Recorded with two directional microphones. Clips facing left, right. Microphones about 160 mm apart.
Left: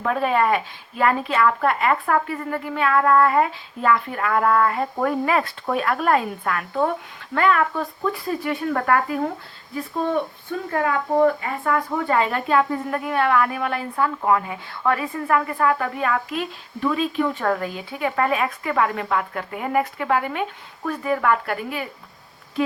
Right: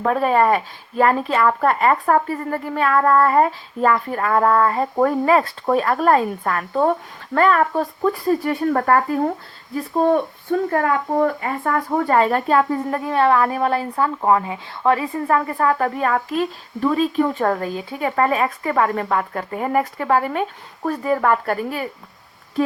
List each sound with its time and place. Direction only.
0.0 s a woman's voice: 40° right (ahead or behind)
11.3 s a woman's voice: 40° right (ahead or behind)